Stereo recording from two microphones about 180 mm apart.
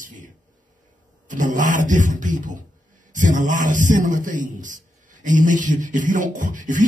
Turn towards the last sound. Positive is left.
turn(degrees=-45)  # may be behind; listen again after turning